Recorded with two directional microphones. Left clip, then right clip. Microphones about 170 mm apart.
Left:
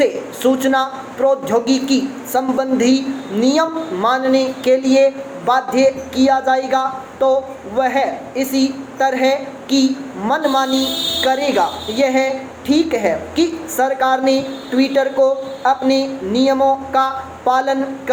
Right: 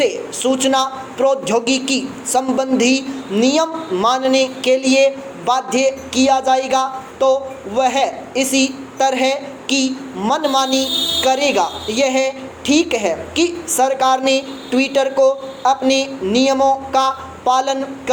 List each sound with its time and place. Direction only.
0.0 s a man's voice: 25° right (ahead or behind)